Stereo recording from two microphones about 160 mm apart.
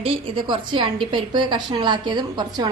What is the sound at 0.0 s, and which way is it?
A woman's voice, 30° right (ahead or behind).